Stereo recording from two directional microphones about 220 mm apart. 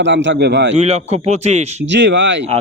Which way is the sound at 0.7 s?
30° right (ahead or behind).